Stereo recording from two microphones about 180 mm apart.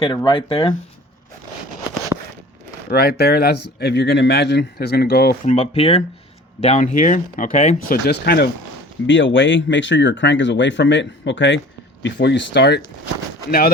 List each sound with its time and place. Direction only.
0.0 s speech: 25° left (ahead or behind)
2.9 s speech: 60° left (ahead or behind)
5.5 s speech: 30° left (ahead or behind)
8.0 s speech: 60° left (ahead or behind)
9.0 s speech: 90° left; by 12.8 s 70° left (ahead or behind)